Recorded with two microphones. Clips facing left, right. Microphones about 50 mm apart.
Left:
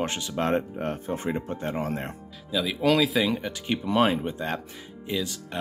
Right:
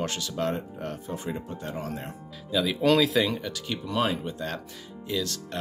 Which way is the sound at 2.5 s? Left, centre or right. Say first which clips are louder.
Right 1 dB; centre.